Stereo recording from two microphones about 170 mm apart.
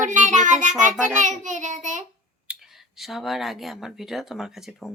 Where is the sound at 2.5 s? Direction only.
5° right (ahead or behind).